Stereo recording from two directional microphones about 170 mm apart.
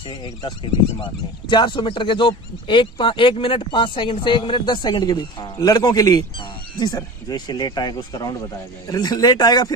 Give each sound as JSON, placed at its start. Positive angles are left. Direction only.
{"t": 1.0, "sound": "speech", "side_deg": 25}